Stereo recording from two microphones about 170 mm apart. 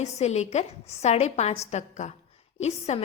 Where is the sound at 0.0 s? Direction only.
40° left (ahead or behind).